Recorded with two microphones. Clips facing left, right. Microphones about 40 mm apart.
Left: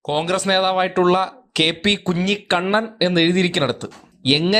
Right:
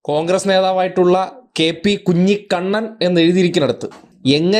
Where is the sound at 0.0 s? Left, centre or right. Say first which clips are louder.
Right 4 dB; left.